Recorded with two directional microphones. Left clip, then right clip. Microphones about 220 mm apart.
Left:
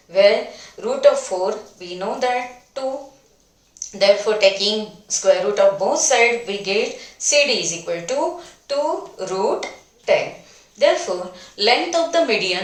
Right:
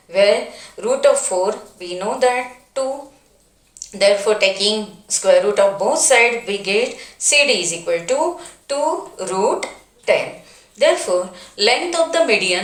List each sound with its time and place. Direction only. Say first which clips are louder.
0.1 s a woman's voice: even; 25° right (ahead or behind)
3.9 s a woman's voice: right 1 dB; 25° right (ahead or behind)